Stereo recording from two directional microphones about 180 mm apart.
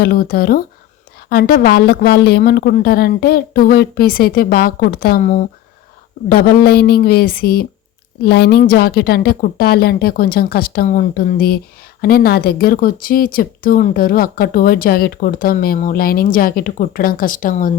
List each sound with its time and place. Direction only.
0.0 s a woman's voice: 55° left (ahead or behind)
6.2 s a woman's voice: 55° left (ahead or behind)